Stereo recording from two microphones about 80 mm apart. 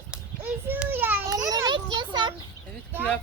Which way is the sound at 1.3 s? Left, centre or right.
Right.